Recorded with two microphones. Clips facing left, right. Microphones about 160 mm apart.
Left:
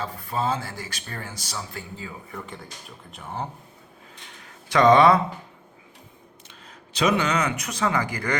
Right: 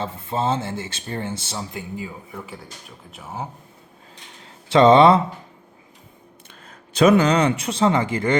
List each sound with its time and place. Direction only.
0.0 s speech: 25° right (ahead or behind); by 3.4 s 5° right (ahead or behind)
4.4 s speech: 25° right (ahead or behind)
6.5 s a sound: 50° right (ahead or behind)
7.3 s speech: 30° right (ahead or behind)